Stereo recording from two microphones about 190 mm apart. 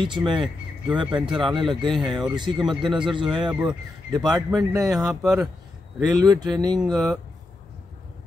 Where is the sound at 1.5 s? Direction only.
Centre (ahead or behind).